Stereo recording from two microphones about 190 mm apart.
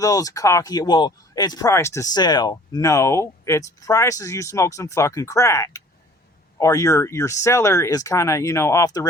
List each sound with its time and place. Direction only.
0.0 s speech: 20° left (ahead or behind)